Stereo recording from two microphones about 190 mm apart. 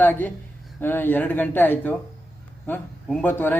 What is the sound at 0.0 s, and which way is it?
A man's voice, 10° left (ahead or behind).